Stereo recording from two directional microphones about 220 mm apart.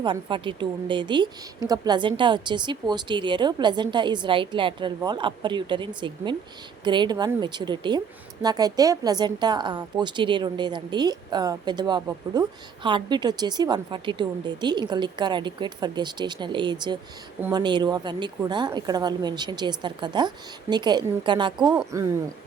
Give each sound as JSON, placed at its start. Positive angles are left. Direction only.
{"t": 0.0, "sound": "a woman's voice", "side_deg": -20}